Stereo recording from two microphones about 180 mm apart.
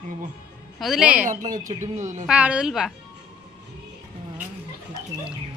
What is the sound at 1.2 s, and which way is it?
Speech, 45° right (ahead or behind).